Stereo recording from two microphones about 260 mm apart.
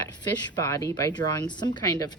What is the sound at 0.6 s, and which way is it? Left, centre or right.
Speech, centre.